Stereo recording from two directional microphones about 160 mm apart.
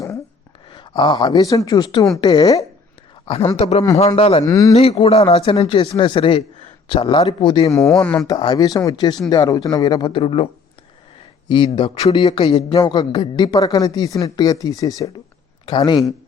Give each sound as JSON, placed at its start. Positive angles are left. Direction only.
{"t": 0.7, "sound": "a man's voice", "side_deg": 30}
{"t": 3.3, "sound": "speech", "side_deg": 35}
{"t": 4.4, "sound": "a man's voice", "side_deg": 20}
{"t": 4.7, "sound": "speech", "side_deg": 40}
{"t": 7.7, "sound": "a man's voice", "side_deg": 20}
{"t": 8.0, "sound": "speech", "side_deg": 5}
{"t": 8.3, "sound": "a man's voice", "side_deg": 30}